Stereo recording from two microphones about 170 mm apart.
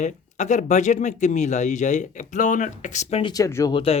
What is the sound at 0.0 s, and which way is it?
Speech, 45° left (ahead or behind).